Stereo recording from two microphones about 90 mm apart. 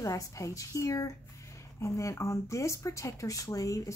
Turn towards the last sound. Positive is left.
turn(degrees=40)  # may be behind; listen again after turning